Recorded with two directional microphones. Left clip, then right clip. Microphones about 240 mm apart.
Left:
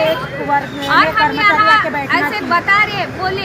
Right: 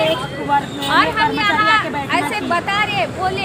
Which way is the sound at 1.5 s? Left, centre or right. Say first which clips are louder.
Left 4 dB; centre.